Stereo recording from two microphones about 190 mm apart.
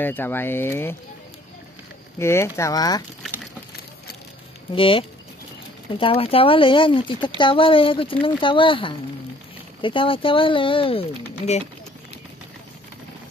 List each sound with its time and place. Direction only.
0.0 s speech: 10° left (ahead or behind)
2.1 s speech: 15° left (ahead or behind)
4.7 s speech: 25° left (ahead or behind)